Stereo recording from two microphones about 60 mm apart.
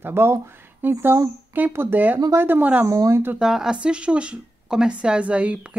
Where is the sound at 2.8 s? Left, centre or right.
Right.